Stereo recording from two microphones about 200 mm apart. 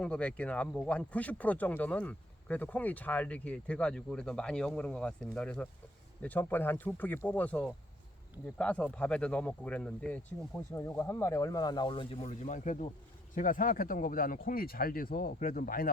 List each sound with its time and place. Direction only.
0.0 s speech: 5° left (ahead or behind); by 15.9 s 45° left (ahead or behind)